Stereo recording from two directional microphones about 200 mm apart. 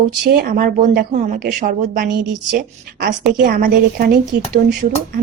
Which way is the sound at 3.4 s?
50° right (ahead or behind).